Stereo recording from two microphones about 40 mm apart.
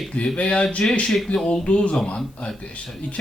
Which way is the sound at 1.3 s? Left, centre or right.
Left.